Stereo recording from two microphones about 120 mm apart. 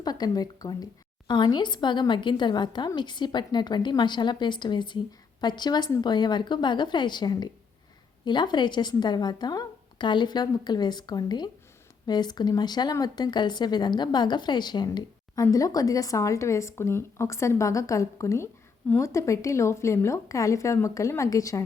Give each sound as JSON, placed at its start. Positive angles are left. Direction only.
{"t": 0.0, "sound": "a woman's voice", "side_deg": 35}